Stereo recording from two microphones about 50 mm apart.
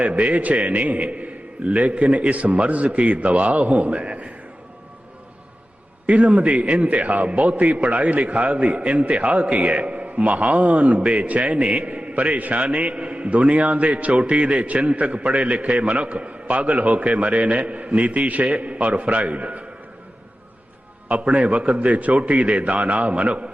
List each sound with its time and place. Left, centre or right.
0.0 s a man's voice: right
6.1 s a man's voice: right
21.1 s a man's voice: right